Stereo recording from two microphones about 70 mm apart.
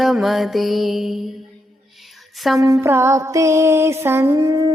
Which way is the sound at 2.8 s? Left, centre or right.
Right.